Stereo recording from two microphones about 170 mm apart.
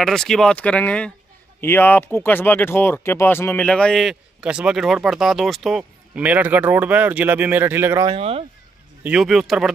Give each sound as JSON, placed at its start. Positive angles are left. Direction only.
{"t": 0.0, "sound": "speech", "side_deg": 5}
{"t": 8.1, "sound": "speech", "side_deg": -35}
{"t": 9.0, "sound": "speech", "side_deg": -5}